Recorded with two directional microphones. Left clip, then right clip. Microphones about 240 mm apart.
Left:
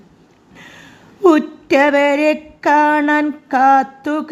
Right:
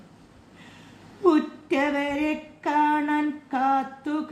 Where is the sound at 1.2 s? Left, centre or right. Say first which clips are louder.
Left 9 dB; left.